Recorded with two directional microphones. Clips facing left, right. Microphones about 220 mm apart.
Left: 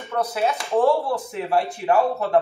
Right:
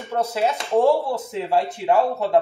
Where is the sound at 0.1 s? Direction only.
25° right (ahead or behind).